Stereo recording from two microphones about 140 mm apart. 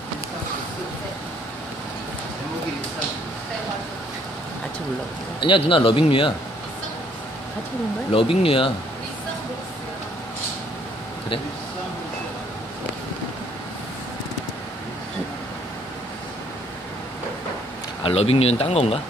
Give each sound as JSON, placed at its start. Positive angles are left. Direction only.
{"t": 5.4, "sound": "speech", "side_deg": 40}
{"t": 8.1, "sound": "speech", "side_deg": 40}
{"t": 18.0, "sound": "speech", "side_deg": 45}